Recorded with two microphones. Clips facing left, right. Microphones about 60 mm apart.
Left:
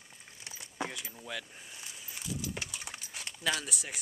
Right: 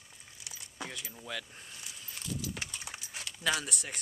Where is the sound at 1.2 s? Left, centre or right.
Centre.